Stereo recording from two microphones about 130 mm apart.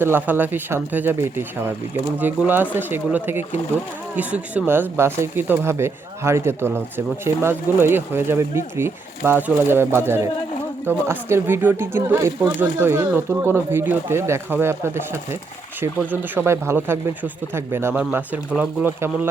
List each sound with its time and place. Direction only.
0.0 s speech: 15° right (ahead or behind)